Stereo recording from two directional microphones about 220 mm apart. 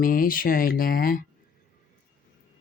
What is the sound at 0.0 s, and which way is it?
Speech, 40° left (ahead or behind).